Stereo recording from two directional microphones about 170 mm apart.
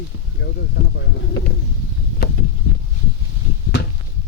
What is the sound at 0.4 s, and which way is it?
Speech, 90° left.